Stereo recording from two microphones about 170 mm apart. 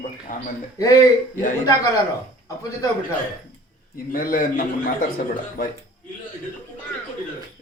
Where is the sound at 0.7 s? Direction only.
20° left (ahead or behind).